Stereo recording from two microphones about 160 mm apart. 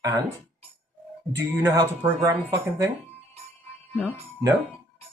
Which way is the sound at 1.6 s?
15° right (ahead or behind).